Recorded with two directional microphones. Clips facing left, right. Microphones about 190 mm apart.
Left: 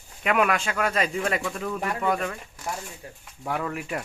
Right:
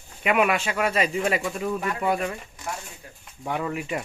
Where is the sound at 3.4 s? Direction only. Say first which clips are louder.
Right 1 dB; 5° right (ahead or behind).